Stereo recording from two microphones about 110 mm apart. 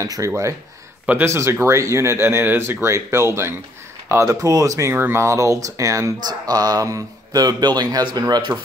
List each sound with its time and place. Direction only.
0.0 s speech: 30° right (ahead or behind)